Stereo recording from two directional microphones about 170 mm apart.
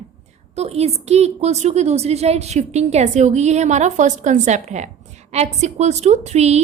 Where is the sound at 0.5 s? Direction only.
40° right (ahead or behind).